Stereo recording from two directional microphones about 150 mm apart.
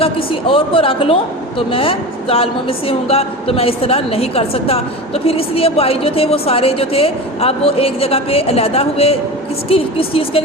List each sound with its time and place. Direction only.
0.0 s a woman's voice: 35° left (ahead or behind)